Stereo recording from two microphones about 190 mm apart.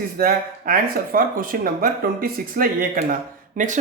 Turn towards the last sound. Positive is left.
turn(degrees=-45)  # may be behind; listen again after turning